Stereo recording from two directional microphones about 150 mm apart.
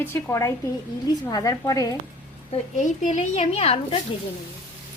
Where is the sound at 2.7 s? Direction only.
50° left (ahead or behind).